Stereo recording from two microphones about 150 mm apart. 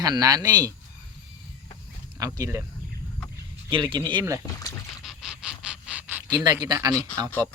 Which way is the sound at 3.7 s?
35° right (ahead or behind).